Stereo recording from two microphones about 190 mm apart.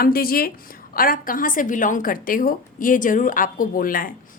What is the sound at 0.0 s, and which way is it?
A woman's voice, 50° left (ahead or behind).